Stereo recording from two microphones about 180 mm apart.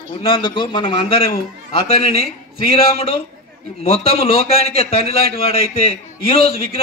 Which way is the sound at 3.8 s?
30° left (ahead or behind).